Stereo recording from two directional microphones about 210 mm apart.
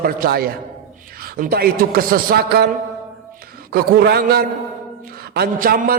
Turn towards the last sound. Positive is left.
turn(degrees=-40)  # may be behind; listen again after turning